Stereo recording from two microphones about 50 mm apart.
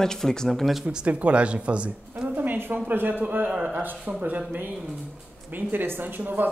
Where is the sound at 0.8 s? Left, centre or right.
Right.